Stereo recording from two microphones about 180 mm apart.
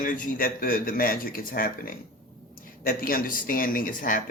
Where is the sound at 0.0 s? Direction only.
50° left (ahead or behind).